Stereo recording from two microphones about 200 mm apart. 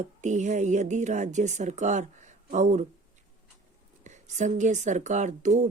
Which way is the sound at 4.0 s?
35° right (ahead or behind).